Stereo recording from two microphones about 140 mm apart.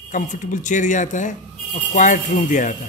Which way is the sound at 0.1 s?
65° left (ahead or behind).